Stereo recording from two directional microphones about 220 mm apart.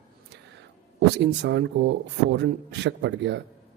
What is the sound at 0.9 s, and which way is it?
Speech, 50° right (ahead or behind).